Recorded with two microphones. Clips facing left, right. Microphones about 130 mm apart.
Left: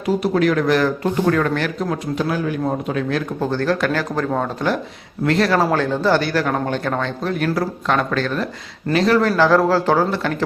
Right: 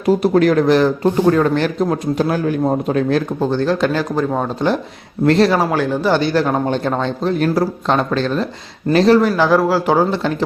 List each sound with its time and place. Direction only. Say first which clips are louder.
0.0 s speech: right 4 dB; 40° right (ahead or behind)
3.4 s a man's voice: right 1 dB; 20° right (ahead or behind)
5.2 s speech: right 5 dB; 35° right (ahead or behind)
5.5 s a man's voice: right 1 dB; 10° right (ahead or behind)
8.9 s speech: right 5 dB; 35° right (ahead or behind)
9.4 s speech: right 1 dB; 10° right (ahead or behind)